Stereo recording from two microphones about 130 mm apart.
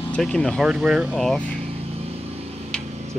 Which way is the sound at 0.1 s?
5° left (ahead or behind).